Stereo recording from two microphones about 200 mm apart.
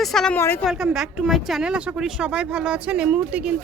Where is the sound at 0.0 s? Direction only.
Centre (ahead or behind).